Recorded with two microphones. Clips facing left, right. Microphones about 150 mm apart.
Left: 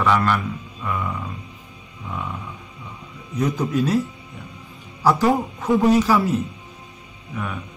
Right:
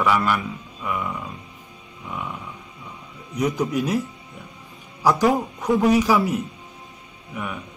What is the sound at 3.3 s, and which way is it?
Speech, 15° right (ahead or behind).